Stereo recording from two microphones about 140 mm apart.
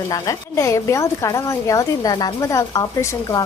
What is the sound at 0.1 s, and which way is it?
Speech, 20° left (ahead or behind).